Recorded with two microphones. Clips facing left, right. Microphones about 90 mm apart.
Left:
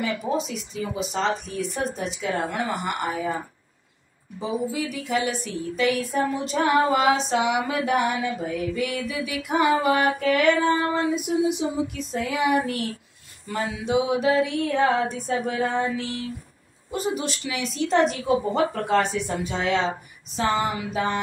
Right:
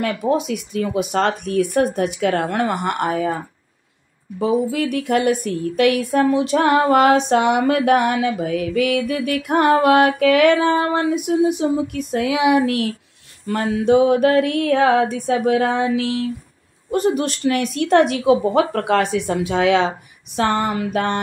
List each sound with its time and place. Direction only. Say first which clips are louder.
0.0 s a woman's voice: right 6 dB; 60° right (ahead or behind)
4.4 s a woman's voice: right 8 dB; 65° right (ahead or behind)
11.4 s mantra: right 6 dB; 55° right (ahead or behind); by 12.9 s 90° right
13.5 s mantra: right 9 dB; 60° right (ahead or behind); by 16.3 s 90° right
16.9 s a woman's voice: right 8 dB; 50° right (ahead or behind); by 19.9 s 85° right
20.3 s speech: right 5 dB; 65° right (ahead or behind)